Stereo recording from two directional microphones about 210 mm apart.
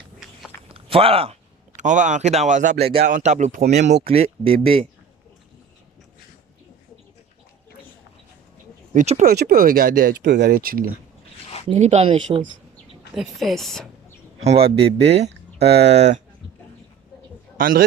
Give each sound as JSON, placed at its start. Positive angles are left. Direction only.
{"t": 0.7, "sound": "speech", "side_deg": -25}
{"t": 8.9, "sound": "speech", "side_deg": -35}
{"t": 11.7, "sound": "speech", "side_deg": -30}
{"t": 13.1, "sound": "speech", "side_deg": 0}
{"t": 14.4, "sound": "speech", "side_deg": -30}
{"t": 14.8, "sound": "speech", "side_deg": -50}
{"t": 15.3, "sound": "a sound", "side_deg": -50}
{"t": 15.9, "sound": "speech", "side_deg": -30}
{"t": 17.6, "sound": "speech", "side_deg": -45}